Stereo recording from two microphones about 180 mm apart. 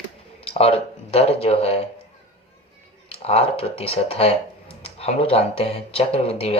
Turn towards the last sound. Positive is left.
turn(degrees=35)  # may be behind; listen again after turning